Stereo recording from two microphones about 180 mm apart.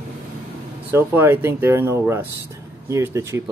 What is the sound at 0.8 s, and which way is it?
A man's voice, 10° right (ahead or behind).